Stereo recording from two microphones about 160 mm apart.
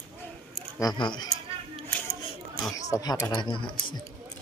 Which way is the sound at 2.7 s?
20° left (ahead or behind).